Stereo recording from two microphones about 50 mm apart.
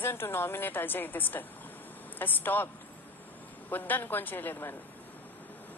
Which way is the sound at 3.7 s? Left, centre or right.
Left.